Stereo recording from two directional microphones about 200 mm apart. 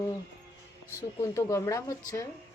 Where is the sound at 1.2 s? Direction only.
15° left (ahead or behind).